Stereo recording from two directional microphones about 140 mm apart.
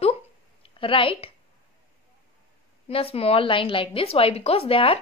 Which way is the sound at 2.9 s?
45° left (ahead or behind).